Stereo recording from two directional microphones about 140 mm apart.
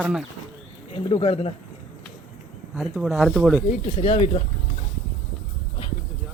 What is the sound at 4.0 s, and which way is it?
Speech, 45° left (ahead or behind).